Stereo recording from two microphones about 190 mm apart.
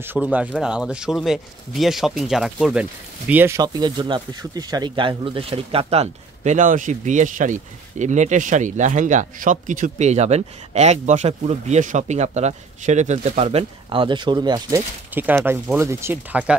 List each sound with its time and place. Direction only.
0.0 s speech: 10° right (ahead or behind)